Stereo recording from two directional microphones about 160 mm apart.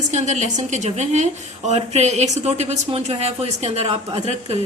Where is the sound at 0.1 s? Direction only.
45° right (ahead or behind).